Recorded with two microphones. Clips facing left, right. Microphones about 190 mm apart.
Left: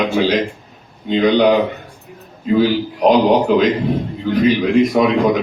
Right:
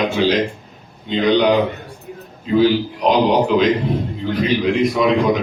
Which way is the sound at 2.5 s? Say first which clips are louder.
Even; 50° left (ahead or behind).